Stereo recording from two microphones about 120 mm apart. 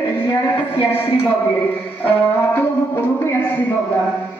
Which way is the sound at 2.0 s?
15° left (ahead or behind).